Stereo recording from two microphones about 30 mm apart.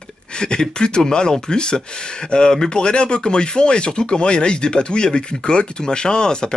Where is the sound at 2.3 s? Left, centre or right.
Left.